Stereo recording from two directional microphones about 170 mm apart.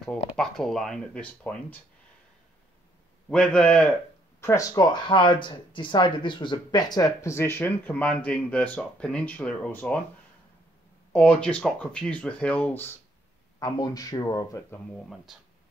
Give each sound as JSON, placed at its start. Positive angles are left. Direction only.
{"t": 0.0, "sound": "speech", "side_deg": 5}
{"t": 3.3, "sound": "speech", "side_deg": 5}
{"t": 4.4, "sound": "speech", "side_deg": 20}
{"t": 11.1, "sound": "speech", "side_deg": 5}
{"t": 13.6, "sound": "speech", "side_deg": 20}
{"t": 14.9, "sound": "speech", "side_deg": 0}